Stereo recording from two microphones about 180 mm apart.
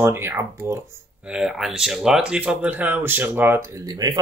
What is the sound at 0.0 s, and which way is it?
Speech, 10° right (ahead or behind).